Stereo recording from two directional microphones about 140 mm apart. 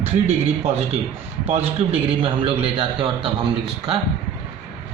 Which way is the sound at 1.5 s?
45° right (ahead or behind).